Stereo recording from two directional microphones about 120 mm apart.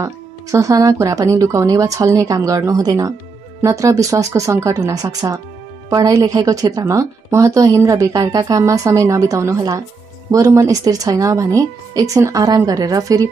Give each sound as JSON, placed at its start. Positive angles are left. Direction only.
{"t": 0.0, "sound": "a woman's voice", "side_deg": -30}